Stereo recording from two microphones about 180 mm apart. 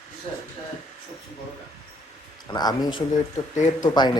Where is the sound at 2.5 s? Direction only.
20° left (ahead or behind).